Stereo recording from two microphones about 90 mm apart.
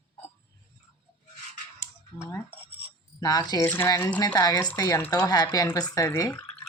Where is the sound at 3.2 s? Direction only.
45° left (ahead or behind).